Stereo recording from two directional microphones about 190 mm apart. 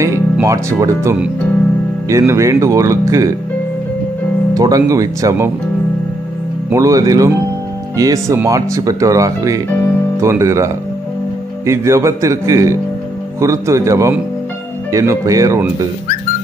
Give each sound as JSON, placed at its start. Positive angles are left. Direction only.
{"t": 0.0, "sound": "speech", "side_deg": -15}
{"t": 4.6, "sound": "speech", "side_deg": -20}
{"t": 6.7, "sound": "speech", "side_deg": -15}